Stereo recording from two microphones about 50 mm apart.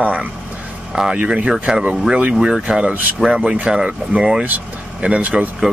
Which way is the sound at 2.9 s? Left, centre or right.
Right.